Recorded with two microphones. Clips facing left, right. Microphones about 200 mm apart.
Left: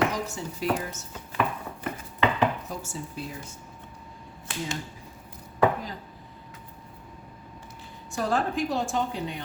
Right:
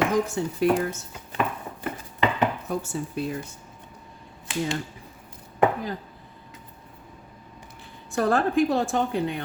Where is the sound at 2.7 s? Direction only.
60° right (ahead or behind).